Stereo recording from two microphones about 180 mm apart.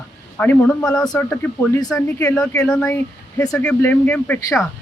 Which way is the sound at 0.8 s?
20° left (ahead or behind).